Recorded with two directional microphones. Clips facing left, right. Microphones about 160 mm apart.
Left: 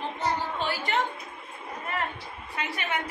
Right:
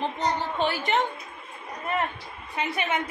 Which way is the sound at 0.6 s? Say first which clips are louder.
Right 3 dB; 20° right (ahead or behind).